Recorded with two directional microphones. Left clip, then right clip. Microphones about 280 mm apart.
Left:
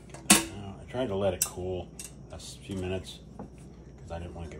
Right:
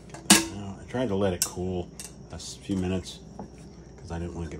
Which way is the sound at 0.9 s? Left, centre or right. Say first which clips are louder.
Right 2 dB; right.